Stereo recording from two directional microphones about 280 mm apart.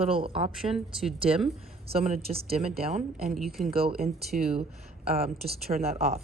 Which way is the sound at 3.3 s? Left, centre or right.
Centre.